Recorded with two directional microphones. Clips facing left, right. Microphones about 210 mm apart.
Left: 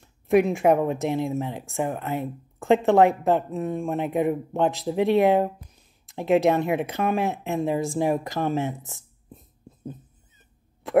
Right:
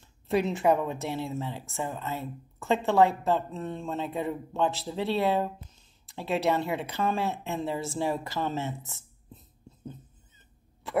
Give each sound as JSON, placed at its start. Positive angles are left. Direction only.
{"t": 0.3, "sound": "speech", "side_deg": 15}